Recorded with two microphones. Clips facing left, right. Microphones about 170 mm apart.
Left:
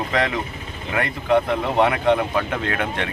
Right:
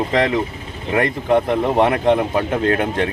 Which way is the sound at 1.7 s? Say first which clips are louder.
Right 1 dB; 40° right (ahead or behind).